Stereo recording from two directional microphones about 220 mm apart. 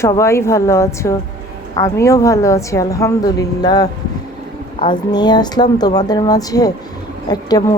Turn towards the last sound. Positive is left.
turn(degrees=20)  # may be behind; listen again after turning